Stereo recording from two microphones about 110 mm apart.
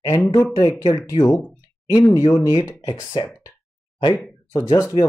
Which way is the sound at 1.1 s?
55° left (ahead or behind).